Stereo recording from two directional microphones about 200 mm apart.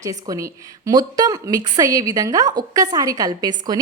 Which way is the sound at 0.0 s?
15° right (ahead or behind).